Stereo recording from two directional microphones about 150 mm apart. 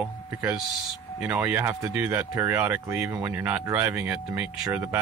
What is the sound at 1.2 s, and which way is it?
Speech, 10° right (ahead or behind).